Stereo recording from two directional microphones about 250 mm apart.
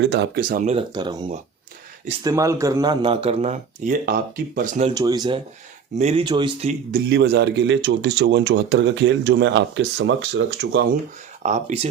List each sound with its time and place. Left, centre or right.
0.0 s speech: right
4.9 s speech: centre
7.1 s speech: right
11.4 s speech: right